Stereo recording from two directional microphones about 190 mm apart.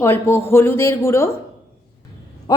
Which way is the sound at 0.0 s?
10° left (ahead or behind).